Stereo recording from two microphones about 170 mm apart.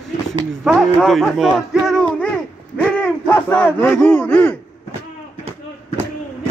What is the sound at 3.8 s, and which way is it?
Speech, 10° left (ahead or behind).